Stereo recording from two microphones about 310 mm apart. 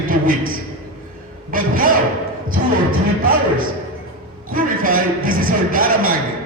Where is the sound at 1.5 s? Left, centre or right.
Right.